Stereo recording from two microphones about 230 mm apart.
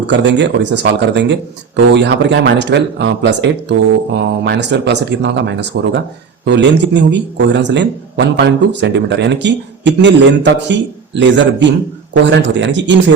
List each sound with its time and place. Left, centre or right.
0.1 s speech: right